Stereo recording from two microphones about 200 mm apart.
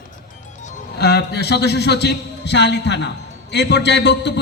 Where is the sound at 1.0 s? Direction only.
55° left (ahead or behind).